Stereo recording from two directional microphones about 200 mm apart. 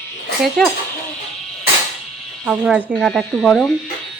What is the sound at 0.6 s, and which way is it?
Speech, 5° left (ahead or behind).